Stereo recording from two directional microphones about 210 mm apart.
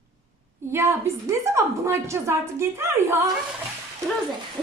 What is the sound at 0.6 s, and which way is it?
A woman's voice, 10° right (ahead or behind).